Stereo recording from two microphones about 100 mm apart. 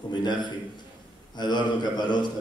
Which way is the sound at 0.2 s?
50° left (ahead or behind).